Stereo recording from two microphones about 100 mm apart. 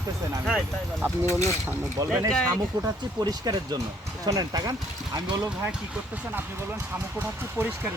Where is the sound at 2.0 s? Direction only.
35° right (ahead or behind).